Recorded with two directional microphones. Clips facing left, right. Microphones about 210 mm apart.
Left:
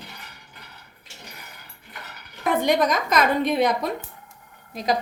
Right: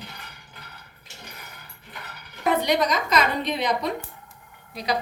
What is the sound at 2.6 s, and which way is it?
Speech, 50° left (ahead or behind).